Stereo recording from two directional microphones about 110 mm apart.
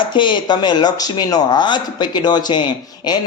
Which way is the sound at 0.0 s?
45° left (ahead or behind).